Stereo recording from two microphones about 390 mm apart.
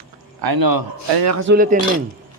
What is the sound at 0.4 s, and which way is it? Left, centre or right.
A man's voice, right.